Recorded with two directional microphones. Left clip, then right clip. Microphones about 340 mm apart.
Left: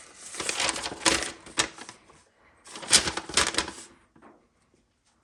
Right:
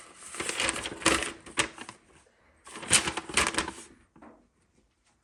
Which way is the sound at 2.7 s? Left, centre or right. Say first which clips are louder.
Left 3 dB; centre.